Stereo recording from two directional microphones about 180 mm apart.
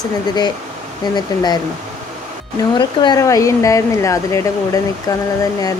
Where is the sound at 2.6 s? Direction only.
25° left (ahead or behind).